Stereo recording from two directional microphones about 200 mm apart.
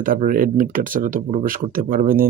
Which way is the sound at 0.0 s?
45° right (ahead or behind).